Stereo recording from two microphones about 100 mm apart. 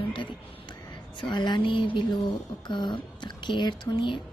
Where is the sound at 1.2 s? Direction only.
50° left (ahead or behind).